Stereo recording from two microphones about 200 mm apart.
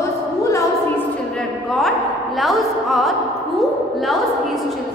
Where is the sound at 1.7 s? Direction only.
Centre (ahead or behind).